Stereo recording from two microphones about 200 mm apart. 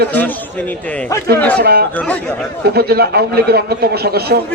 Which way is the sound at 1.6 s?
50° right (ahead or behind).